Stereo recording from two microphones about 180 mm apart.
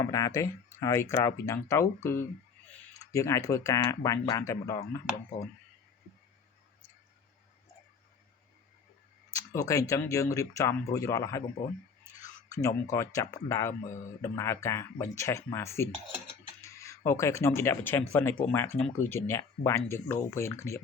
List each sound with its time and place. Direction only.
0.0 s speech: 20° left (ahead or behind)
9.3 s speech: 20° left (ahead or behind)
12.5 s speech: 20° left (ahead or behind)